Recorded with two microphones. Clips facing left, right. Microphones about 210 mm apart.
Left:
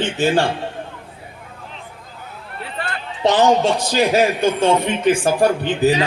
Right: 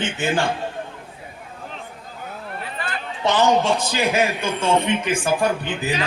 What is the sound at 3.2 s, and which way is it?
A man's voice, 35° left (ahead or behind).